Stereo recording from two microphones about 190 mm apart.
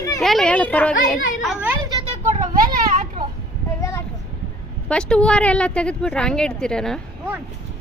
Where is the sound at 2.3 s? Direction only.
40° right (ahead or behind).